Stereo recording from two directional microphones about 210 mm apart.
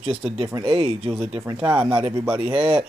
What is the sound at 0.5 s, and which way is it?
Speech, 20° right (ahead or behind).